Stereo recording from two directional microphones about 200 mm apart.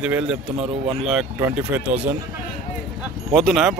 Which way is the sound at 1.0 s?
5° right (ahead or behind).